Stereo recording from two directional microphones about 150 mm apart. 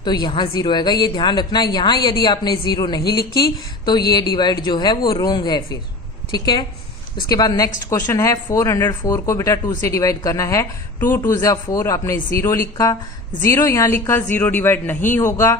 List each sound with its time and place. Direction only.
0.0 s a woman's voice: 30° left (ahead or behind)